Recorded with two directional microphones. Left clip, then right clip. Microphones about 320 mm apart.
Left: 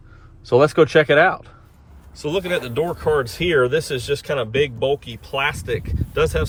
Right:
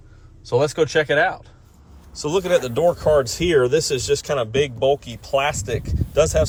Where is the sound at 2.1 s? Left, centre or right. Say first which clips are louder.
Right 3 dB; centre.